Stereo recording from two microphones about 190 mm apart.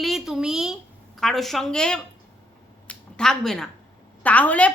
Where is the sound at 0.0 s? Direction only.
Centre (ahead or behind).